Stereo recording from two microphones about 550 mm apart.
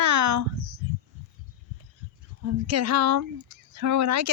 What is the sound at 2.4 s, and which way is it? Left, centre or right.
Speech, right.